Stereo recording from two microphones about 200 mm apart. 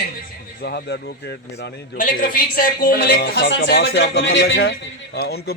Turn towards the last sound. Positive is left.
turn(degrees=55)  # may be behind; listen again after turning